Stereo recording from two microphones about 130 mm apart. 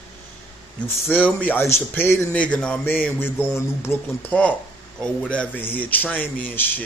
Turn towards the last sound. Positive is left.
turn(degrees=15)  # may be behind; listen again after turning